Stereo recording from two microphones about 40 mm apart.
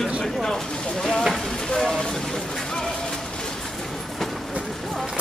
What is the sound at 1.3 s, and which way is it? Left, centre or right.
Stir, centre.